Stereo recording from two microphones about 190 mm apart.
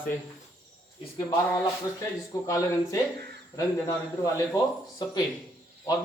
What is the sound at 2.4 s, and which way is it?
A man's voice, 20° left (ahead or behind).